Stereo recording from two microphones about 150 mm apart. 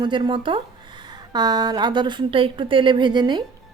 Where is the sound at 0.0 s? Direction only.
30° right (ahead or behind).